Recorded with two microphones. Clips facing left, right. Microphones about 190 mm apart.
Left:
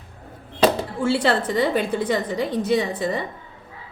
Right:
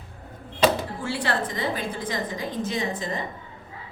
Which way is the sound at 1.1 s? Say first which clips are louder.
Left 7 dB; 75° left (ahead or behind).